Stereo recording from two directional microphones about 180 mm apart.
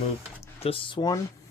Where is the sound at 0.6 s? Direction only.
30° left (ahead or behind).